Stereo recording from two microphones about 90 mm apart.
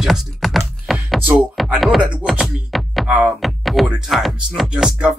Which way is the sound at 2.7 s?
Centre (ahead or behind).